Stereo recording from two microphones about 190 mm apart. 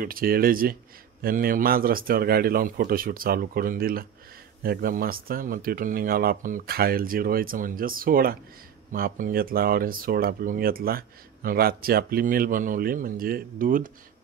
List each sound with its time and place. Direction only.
0.0 s speech: 50° right (ahead or behind)